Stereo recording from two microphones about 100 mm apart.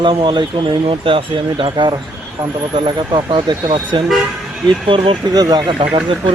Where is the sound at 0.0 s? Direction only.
50° right (ahead or behind).